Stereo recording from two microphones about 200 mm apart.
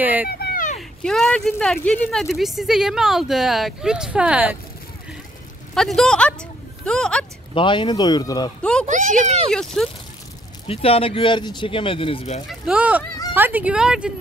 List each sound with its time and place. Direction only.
0.0 s a sound: 10° right (ahead or behind)
0.4 s a sound: 45° left (ahead or behind)
0.7 s speech: centre (ahead or behind)
5.8 s speech: centre (ahead or behind)
7.5 s speech: 25° left (ahead or behind)
8.8 s speech: 40° right (ahead or behind)
9.5 s speech: centre (ahead or behind)
10.7 s speech: 30° left (ahead or behind)
12.4 s speech: 5° right (ahead or behind)